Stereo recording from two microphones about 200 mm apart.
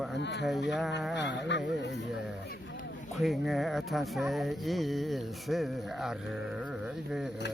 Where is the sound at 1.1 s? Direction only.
60° left (ahead or behind).